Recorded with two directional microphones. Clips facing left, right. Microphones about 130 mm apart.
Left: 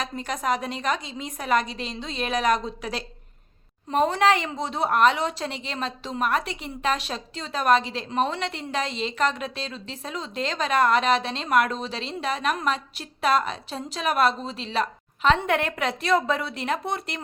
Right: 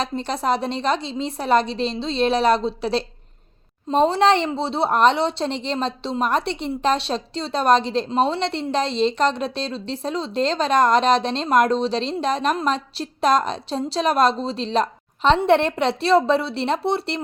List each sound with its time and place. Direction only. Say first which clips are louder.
0.0 s a woman's voice: right 5 dB; 30° right (ahead or behind)